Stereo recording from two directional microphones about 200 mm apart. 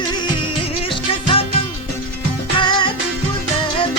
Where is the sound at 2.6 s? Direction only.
20° left (ahead or behind).